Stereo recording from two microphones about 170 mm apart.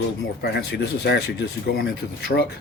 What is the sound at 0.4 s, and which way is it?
Speech, 70° left (ahead or behind).